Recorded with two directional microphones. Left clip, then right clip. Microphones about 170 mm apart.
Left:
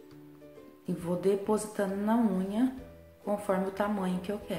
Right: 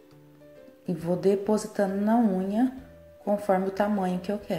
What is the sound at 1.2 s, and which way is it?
A woman's voice, 20° right (ahead or behind).